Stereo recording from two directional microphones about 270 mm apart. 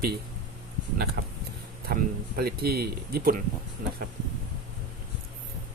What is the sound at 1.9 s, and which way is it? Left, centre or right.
A man's voice, right.